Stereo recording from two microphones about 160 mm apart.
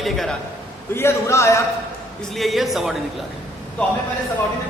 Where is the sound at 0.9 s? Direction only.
15° left (ahead or behind).